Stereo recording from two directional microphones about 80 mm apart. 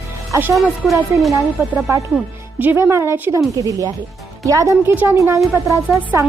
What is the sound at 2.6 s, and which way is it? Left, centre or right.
Speech, right.